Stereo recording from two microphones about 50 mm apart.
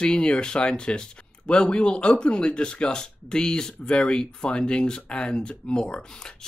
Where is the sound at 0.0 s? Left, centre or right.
Centre.